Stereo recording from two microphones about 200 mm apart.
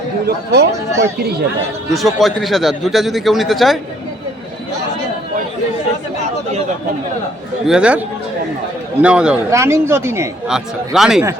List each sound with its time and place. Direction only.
0.3 s speech: 55° right (ahead or behind)
1.9 s a man's voice: centre (ahead or behind)
7.7 s a man's voice: 5° right (ahead or behind)
10.5 s a man's voice: centre (ahead or behind)